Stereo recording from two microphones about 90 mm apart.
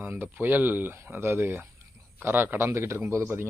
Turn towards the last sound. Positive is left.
turn(degrees=-30)  # may be behind; listen again after turning